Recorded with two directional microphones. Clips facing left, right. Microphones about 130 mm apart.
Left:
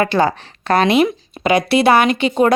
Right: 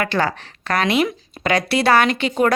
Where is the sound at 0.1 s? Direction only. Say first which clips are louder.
Left 5 dB; 20° left (ahead or behind).